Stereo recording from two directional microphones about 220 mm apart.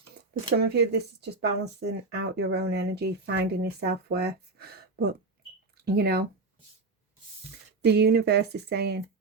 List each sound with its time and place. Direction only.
0.5 s speech: 45° right (ahead or behind)
7.9 s speech: 50° right (ahead or behind)